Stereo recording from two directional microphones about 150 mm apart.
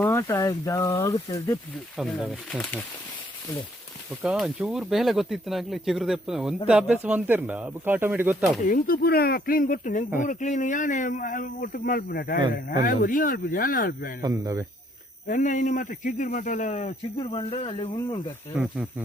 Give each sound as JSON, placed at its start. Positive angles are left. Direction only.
{"t": 0.0, "sound": "speech", "side_deg": 20}
{"t": 2.0, "sound": "speech", "side_deg": 0}
{"t": 4.2, "sound": "speech", "side_deg": -5}
{"t": 8.6, "sound": "a man's voice", "side_deg": 70}
{"t": 14.2, "sound": "a man's voice", "side_deg": -25}
{"t": 15.3, "sound": "a man's voice", "side_deg": 60}
{"t": 18.6, "sound": "speech", "side_deg": -5}